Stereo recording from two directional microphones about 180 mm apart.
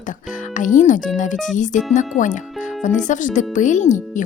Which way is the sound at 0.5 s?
45° left (ahead or behind).